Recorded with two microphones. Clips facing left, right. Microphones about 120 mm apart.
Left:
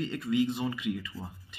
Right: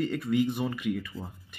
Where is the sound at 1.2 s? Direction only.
5° left (ahead or behind).